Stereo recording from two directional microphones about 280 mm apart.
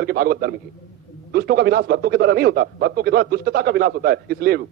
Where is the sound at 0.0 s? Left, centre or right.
Right.